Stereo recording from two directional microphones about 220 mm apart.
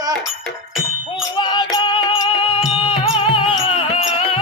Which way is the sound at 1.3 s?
20° left (ahead or behind).